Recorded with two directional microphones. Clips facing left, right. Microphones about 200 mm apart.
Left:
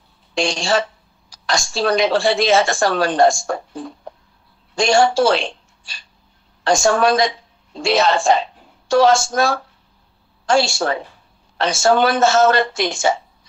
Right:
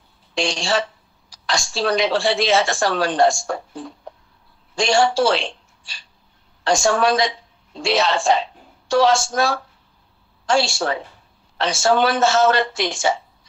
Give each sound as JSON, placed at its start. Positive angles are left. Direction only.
{"t": 0.3, "sound": "a woman's voice", "side_deg": 45}
{"t": 4.7, "sound": "a woman's voice", "side_deg": 45}